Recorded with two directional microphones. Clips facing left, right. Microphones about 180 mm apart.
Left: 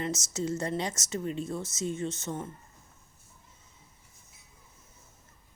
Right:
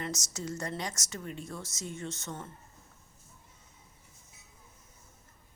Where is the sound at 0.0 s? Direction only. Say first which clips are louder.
Left 6 dB; 25° left (ahead or behind).